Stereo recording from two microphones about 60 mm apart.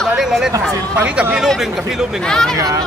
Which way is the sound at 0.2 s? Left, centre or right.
Centre.